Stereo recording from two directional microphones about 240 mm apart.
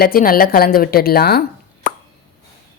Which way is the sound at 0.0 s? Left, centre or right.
Left.